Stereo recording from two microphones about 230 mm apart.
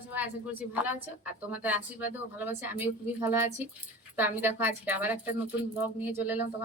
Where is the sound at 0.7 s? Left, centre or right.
Centre.